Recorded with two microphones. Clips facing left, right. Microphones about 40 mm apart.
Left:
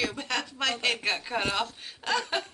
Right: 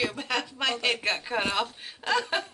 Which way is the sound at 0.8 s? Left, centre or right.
Centre.